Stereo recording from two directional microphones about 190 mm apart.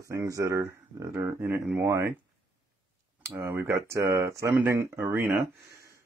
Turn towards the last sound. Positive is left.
turn(degrees=-10)  # may be behind; listen again after turning